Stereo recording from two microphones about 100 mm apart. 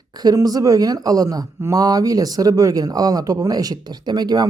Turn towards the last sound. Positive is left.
turn(degrees=-45)  # may be behind; listen again after turning